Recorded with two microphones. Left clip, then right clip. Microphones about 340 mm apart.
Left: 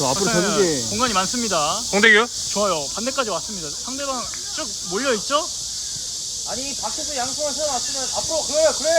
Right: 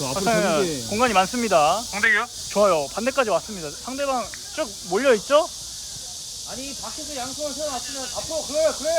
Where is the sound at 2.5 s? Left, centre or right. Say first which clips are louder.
Right 4 dB; right.